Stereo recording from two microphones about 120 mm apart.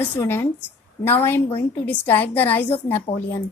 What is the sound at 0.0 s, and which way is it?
A woman's voice, 20° left (ahead or behind).